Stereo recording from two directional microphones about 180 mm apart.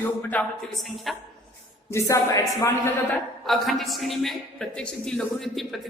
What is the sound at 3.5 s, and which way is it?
A man's voice, centre (ahead or behind).